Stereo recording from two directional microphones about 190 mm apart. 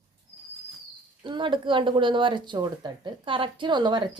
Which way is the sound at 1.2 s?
25° right (ahead or behind).